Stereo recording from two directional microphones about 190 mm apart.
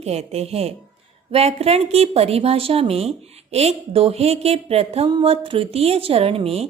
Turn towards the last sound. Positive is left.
turn(degrees=-30)  # may be behind; listen again after turning